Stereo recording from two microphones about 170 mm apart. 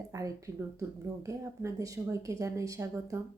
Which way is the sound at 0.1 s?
20° right (ahead or behind).